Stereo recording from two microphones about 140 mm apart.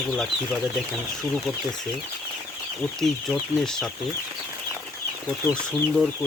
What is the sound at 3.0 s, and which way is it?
Speech, 5° left (ahead or behind).